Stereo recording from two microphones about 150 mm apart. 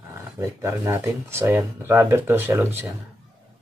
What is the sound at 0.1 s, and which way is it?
Speech, 20° right (ahead or behind).